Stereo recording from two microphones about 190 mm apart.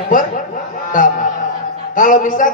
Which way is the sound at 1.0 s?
45° left (ahead or behind).